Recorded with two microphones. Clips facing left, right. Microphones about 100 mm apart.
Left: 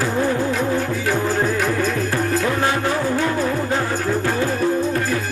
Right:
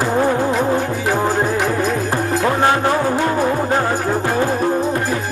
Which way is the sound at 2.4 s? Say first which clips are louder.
Right 8 dB; 50° right (ahead or behind).